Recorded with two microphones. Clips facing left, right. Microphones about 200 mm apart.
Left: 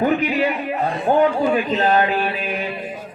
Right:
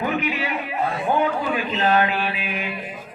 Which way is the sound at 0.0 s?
35° left (ahead or behind).